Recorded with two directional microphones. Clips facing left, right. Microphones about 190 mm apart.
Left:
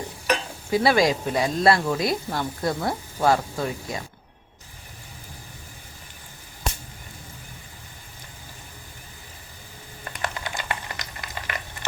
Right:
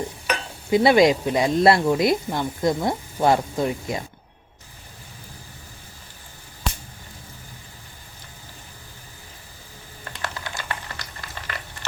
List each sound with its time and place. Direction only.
0.7 s speech: 20° right (ahead or behind)
10.0 s boiling: 15° left (ahead or behind)